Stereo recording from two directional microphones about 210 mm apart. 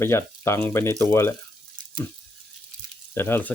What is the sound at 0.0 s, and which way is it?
Speech, 10° left (ahead or behind).